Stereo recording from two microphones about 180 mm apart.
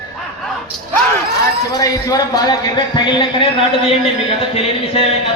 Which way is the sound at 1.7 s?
20° left (ahead or behind).